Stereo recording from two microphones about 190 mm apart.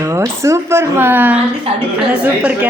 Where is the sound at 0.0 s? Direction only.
15° right (ahead or behind).